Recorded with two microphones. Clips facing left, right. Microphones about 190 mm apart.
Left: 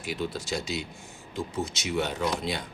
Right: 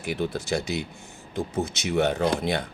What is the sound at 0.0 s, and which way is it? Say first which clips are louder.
Speech: right 4 dB; 60° right (ahead or behind).